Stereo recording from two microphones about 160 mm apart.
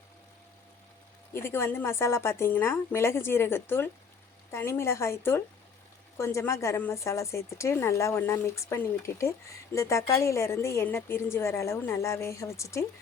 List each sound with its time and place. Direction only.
1.3 s a woman's voice: 15° left (ahead or behind)